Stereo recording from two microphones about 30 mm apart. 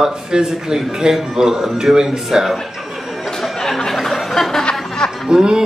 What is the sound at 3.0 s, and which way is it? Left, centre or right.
Chatter, centre.